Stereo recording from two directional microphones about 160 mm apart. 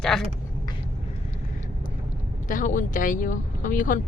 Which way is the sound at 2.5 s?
55° left (ahead or behind).